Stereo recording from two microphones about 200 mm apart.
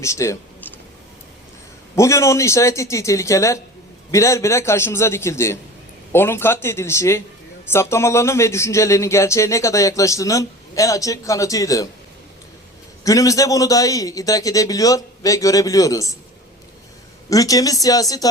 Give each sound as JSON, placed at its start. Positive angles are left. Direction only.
{"t": 0.0, "sound": "speech", "side_deg": 15}
{"t": 2.0, "sound": "speech", "side_deg": 15}
{"t": 13.1, "sound": "speech", "side_deg": 15}
{"t": 17.2, "sound": "speech", "side_deg": 15}